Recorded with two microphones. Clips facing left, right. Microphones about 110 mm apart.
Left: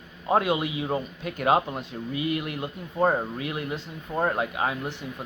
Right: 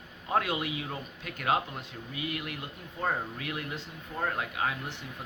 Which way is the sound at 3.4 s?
20° left (ahead or behind).